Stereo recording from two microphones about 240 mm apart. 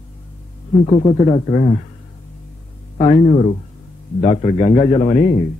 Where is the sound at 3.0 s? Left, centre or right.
Left.